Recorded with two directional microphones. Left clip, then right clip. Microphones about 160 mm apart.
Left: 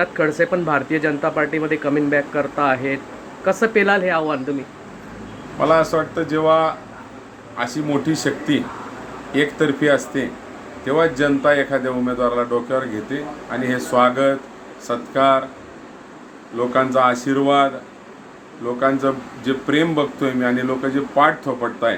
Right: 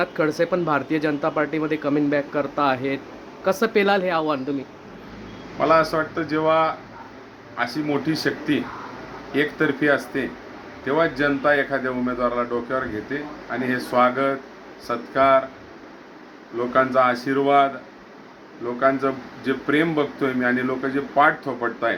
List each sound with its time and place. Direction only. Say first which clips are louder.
0.0 s speech: left 3 dB; 15° right (ahead or behind)
5.5 s a man's voice: left 2 dB; 15° left (ahead or behind)
16.6 s a man's voice: left 2 dB; 10° left (ahead or behind)
18.8 s a man's voice: left 2 dB; 10° left (ahead or behind)